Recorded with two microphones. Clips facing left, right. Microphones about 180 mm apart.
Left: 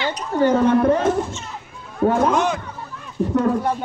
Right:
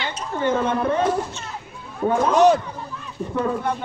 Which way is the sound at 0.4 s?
40° left (ahead or behind).